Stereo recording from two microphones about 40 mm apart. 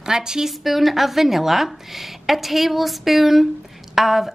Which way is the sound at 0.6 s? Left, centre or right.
Centre.